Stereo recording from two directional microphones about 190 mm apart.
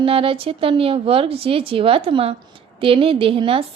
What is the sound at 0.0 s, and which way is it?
A woman's voice, 30° right (ahead or behind).